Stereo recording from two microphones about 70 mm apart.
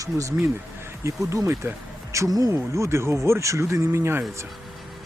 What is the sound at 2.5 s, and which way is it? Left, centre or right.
Speech, right.